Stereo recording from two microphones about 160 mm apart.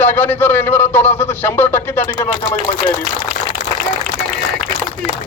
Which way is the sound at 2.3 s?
30° left (ahead or behind).